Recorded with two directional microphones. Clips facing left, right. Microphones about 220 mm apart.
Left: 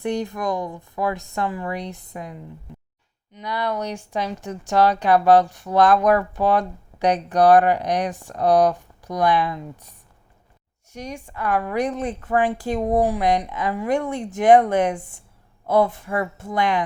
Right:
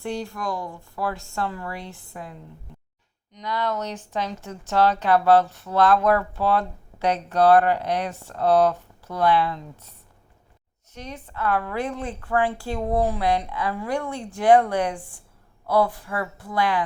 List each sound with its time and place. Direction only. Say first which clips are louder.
0.0 s a woman's voice: left 5 dB; 20° left (ahead or behind)
10.9 s a woman's voice: left 3 dB; 15° left (ahead or behind)